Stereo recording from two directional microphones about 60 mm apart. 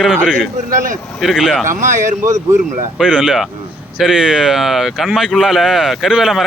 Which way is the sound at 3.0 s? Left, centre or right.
Centre.